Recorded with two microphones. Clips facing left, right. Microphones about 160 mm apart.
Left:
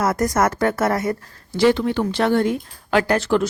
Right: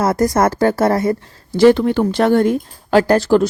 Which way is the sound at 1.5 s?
45° right (ahead or behind).